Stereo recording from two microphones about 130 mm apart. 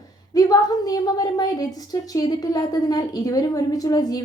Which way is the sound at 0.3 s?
30° left (ahead or behind).